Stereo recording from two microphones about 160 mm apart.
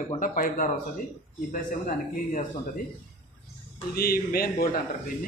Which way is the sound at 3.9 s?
70° left (ahead or behind).